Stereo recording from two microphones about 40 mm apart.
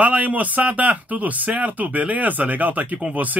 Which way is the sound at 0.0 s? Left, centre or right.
Right.